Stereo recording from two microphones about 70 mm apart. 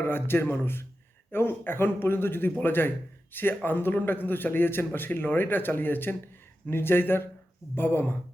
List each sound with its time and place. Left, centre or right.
0.0 s a man's voice: left